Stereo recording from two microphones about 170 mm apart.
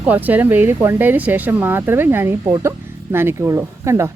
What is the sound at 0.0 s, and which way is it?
Speech, 10° right (ahead or behind).